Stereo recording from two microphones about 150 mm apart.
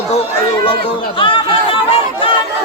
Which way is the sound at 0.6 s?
35° left (ahead or behind).